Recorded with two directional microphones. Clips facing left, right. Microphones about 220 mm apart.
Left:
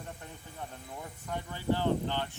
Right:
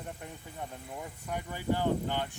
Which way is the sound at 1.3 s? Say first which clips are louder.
Even; 15° right (ahead or behind).